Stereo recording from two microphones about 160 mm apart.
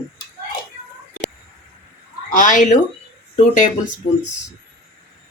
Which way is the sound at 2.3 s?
55° left (ahead or behind).